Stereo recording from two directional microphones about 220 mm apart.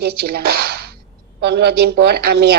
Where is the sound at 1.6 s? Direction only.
45° right (ahead or behind).